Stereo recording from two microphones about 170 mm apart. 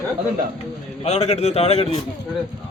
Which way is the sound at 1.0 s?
40° left (ahead or behind).